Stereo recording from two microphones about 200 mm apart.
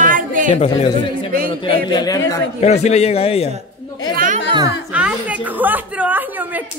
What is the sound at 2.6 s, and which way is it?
Speech, 35° left (ahead or behind).